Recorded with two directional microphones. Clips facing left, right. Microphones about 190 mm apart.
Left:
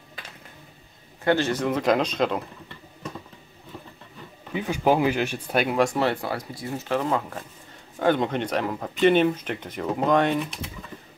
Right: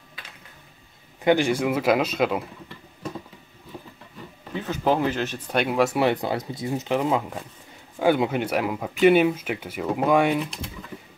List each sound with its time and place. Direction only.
1.2 s speech: 15° right (ahead or behind)
4.5 s speech: 10° left (ahead or behind)
5.9 s speech: 20° right (ahead or behind)
10.4 s speech: centre (ahead or behind)